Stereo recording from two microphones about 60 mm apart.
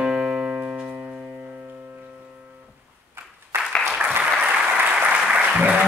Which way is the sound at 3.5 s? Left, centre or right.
Right.